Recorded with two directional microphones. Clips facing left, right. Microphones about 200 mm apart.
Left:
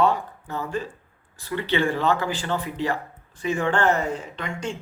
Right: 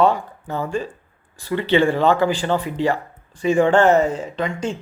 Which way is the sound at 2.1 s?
15° right (ahead or behind).